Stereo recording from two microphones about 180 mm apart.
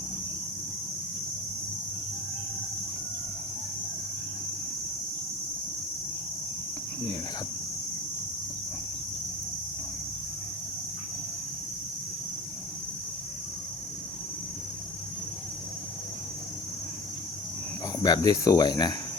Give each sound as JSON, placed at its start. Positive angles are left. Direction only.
{"t": 18.0, "sound": "speech", "side_deg": 20}